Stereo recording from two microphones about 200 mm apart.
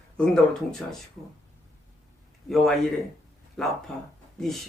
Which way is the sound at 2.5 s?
Centre (ahead or behind).